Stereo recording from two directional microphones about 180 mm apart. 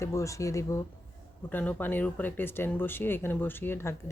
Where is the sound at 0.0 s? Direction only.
15° left (ahead or behind).